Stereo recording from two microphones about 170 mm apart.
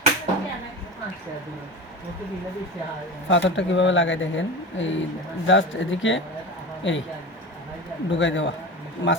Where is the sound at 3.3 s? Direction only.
90° left.